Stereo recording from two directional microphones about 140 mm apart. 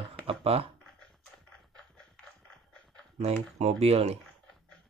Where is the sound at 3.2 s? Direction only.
50° right (ahead or behind).